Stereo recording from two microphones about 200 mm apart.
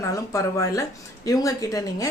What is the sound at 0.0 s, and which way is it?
Speech, 15° left (ahead or behind).